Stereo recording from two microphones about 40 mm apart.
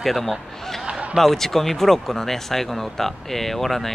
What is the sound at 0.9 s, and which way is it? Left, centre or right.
Basketball bounce, right.